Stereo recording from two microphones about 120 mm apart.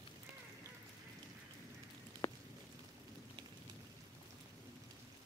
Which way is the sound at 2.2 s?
30° left (ahead or behind).